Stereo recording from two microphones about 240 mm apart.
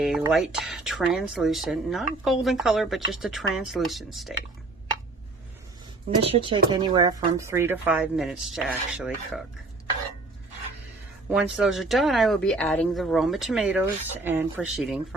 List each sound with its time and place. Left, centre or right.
0.2 s speech: centre
6.1 s speech: right; by 9.4 s centre
11.3 s speech: centre